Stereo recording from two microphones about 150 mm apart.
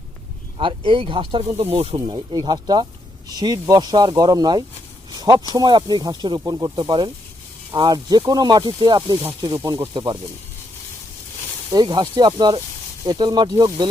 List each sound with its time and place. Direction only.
0.6 s speech: 35° right (ahead or behind)
2.0 s speech: 30° right (ahead or behind)
9.6 s speech: 20° right (ahead or behind)
11.7 s speech: 30° right (ahead or behind)